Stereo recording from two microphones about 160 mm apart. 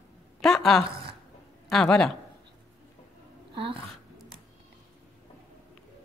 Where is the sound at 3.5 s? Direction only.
35° right (ahead or behind).